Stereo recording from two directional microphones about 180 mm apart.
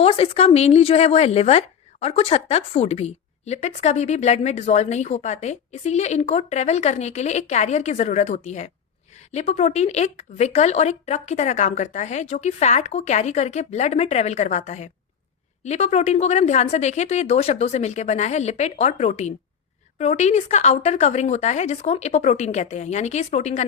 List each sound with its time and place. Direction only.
0.0 s speech: 30° left (ahead or behind)